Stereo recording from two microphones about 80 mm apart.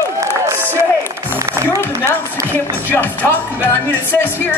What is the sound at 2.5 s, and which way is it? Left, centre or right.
Speech, left.